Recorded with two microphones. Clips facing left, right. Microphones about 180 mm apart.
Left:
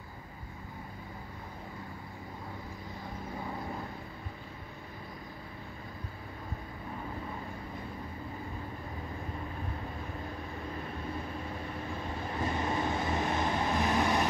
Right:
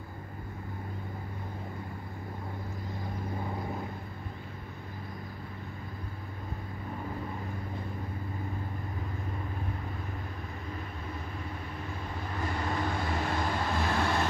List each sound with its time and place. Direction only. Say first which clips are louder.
12.4 s vehicle: left 1 dB; 20° left (ahead or behind)